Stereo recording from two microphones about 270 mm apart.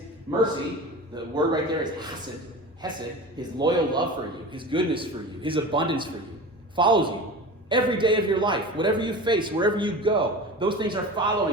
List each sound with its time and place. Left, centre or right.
0.3 s a man's voice: centre